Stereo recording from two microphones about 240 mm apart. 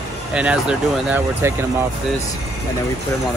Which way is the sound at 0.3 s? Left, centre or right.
Centre.